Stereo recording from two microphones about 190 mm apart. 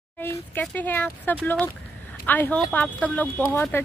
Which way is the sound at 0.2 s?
10° left (ahead or behind).